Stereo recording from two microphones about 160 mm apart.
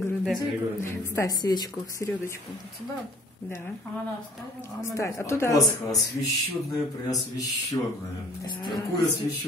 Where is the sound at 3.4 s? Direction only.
15° left (ahead or behind).